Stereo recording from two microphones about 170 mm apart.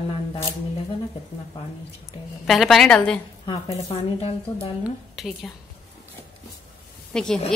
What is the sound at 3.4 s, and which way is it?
Speech, 35° left (ahead or behind).